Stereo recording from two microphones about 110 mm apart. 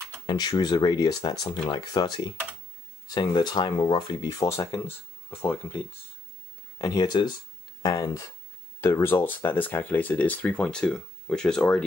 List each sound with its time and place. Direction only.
0.3 s speech: 40° left (ahead or behind)
4.5 s speech: 25° left (ahead or behind)
6.8 s speech: 40° left (ahead or behind)
7.8 s speech: 30° left (ahead or behind); by 11.8 s 5° left (ahead or behind)